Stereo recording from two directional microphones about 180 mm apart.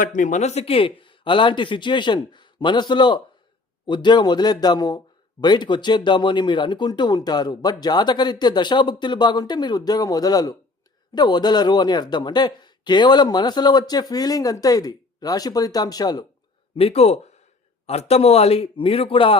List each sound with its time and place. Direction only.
0.0 s speech: 45° left (ahead or behind); by 16.2 s 20° left (ahead or behind)
16.7 s a man's voice: 35° left (ahead or behind)